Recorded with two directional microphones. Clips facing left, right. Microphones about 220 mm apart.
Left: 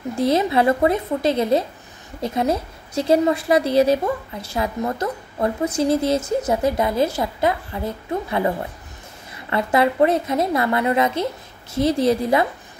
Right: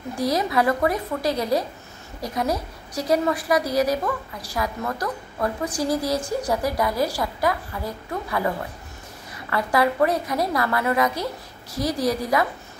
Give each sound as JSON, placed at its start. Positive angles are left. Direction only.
{"t": 0.2, "sound": "a woman's voice", "side_deg": 25}